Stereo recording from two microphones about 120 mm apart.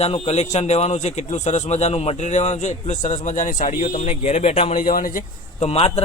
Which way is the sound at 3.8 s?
60° left (ahead or behind).